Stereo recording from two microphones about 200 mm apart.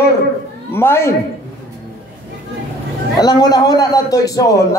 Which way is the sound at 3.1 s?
20° left (ahead or behind).